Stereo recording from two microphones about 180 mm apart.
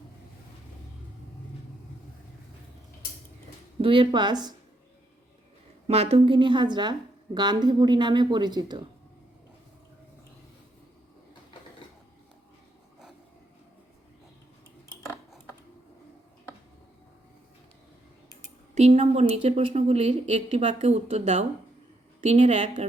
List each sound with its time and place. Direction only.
3.8 s a woman's voice: 30° right (ahead or behind)
5.9 s a woman's voice: 35° right (ahead or behind)
18.7 s a woman's voice: 35° right (ahead or behind)